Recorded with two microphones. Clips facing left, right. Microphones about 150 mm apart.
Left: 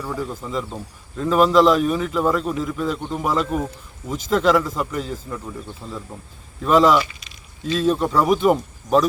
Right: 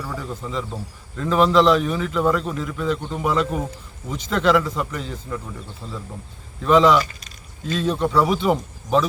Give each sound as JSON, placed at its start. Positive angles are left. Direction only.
{"t": 0.0, "sound": "a man's voice", "side_deg": 5}
{"t": 7.0, "sound": "speech", "side_deg": -45}
{"t": 7.7, "sound": "a man's voice", "side_deg": 0}